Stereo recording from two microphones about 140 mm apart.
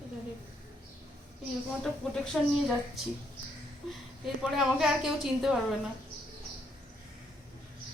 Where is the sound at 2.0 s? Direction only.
5° left (ahead or behind).